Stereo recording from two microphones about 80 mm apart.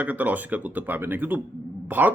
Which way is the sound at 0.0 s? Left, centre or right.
Right.